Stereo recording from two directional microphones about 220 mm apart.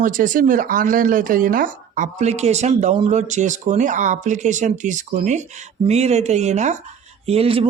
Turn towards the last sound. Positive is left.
turn(degrees=-25)  # may be behind; listen again after turning